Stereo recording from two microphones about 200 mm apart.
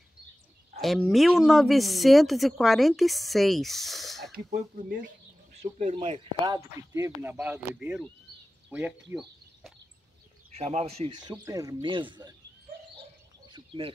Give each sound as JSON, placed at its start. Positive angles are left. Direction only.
{"t": 0.7, "sound": "speech", "side_deg": 0}
{"t": 4.5, "sound": "speech", "side_deg": -45}
{"t": 5.6, "sound": "speech", "side_deg": -35}
{"t": 10.6, "sound": "speech", "side_deg": -30}
{"t": 13.5, "sound": "a sound", "side_deg": -25}